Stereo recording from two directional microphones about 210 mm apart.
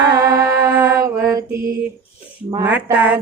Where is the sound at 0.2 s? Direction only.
15° right (ahead or behind).